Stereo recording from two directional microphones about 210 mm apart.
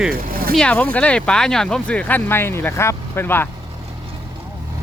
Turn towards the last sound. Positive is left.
turn(degrees=10)  # may be behind; listen again after turning